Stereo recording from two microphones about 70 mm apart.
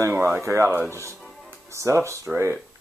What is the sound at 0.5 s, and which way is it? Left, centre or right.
Speech, right.